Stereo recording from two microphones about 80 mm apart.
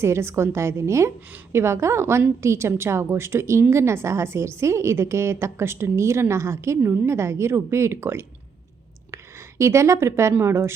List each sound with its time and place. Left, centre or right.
0.0 s a woman's voice: right